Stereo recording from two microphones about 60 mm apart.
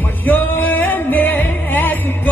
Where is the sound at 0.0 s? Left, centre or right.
Left.